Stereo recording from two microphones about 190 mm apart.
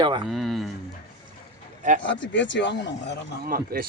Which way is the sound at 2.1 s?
70° left (ahead or behind).